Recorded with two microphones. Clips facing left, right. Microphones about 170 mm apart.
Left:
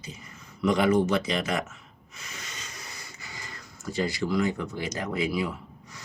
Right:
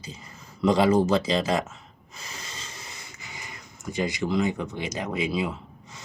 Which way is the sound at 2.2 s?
30° right (ahead or behind).